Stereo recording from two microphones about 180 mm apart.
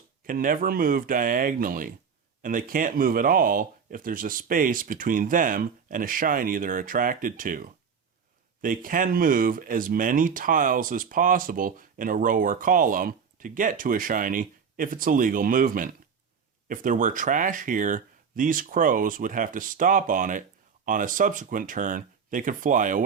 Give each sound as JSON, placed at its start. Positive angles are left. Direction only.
{"t": 0.3, "sound": "speech", "side_deg": -50}